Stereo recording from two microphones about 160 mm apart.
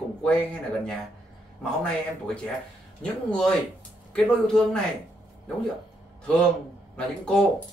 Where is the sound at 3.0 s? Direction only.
5° left (ahead or behind).